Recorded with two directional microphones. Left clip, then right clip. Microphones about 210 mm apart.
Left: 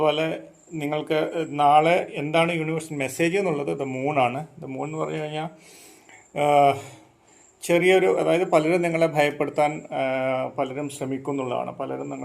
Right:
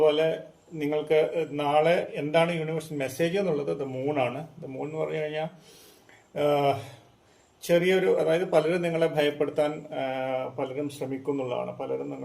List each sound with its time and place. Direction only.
0.0 s a man's voice: 30° left (ahead or behind)